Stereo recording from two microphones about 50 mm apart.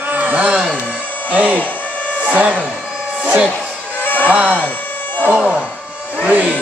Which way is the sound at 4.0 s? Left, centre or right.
Left.